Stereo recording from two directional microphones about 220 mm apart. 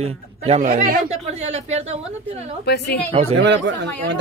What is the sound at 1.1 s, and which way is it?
Speech, 30° right (ahead or behind).